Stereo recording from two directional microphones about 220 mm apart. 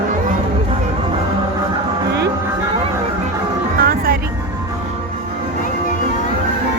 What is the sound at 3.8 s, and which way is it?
Music, 40° right (ahead or behind).